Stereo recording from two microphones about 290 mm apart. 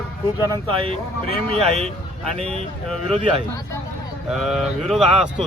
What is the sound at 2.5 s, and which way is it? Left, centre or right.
Speech, centre.